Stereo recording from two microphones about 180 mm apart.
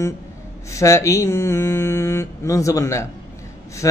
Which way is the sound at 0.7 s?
15° left (ahead or behind).